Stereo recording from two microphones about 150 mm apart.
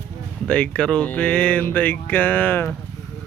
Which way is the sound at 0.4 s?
10° left (ahead or behind).